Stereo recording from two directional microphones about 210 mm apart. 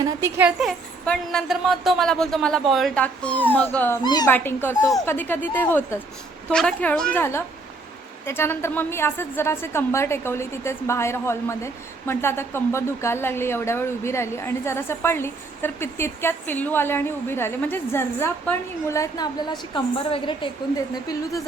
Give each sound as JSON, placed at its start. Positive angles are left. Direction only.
{"t": 0.0, "sound": "a woman's voice", "side_deg": -15}